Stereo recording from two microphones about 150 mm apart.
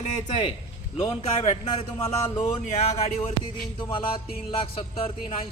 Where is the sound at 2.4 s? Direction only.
50° left (ahead or behind).